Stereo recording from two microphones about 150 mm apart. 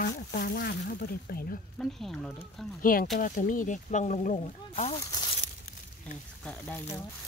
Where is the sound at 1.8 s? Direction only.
Centre (ahead or behind).